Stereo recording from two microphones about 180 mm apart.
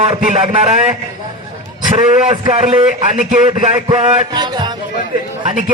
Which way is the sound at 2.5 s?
35° right (ahead or behind).